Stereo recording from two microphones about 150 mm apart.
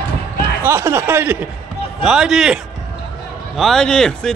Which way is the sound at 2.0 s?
5° right (ahead or behind).